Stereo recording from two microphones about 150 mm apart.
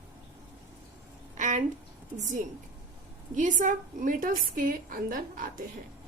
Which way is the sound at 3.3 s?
55° right (ahead or behind).